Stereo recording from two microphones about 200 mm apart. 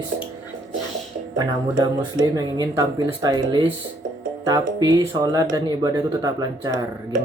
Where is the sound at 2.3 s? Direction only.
20° right (ahead or behind).